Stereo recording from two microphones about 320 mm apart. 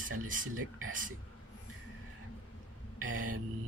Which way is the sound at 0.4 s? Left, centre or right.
Right.